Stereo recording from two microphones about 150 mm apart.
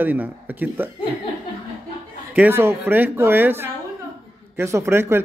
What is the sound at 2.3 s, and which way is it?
A man's voice, 15° right (ahead or behind).